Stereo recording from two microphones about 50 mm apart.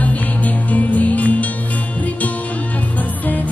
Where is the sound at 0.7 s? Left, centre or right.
Left.